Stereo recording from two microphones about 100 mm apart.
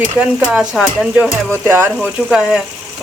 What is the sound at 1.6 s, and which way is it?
Speech, 25° right (ahead or behind).